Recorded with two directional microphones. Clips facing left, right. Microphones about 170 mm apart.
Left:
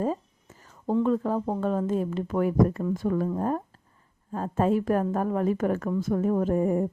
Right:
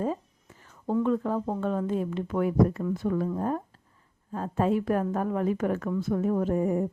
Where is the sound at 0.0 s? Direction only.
40° left (ahead or behind).